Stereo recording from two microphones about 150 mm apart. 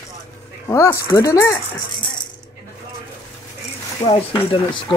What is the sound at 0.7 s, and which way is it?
Speech, 20° left (ahead or behind).